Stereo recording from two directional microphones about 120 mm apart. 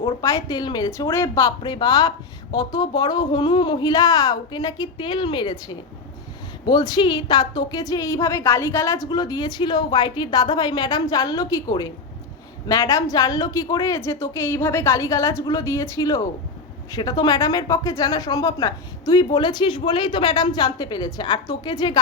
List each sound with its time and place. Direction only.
0.2 s a woman's voice: 30° left (ahead or behind)
9.0 s a woman's voice: 35° left (ahead or behind)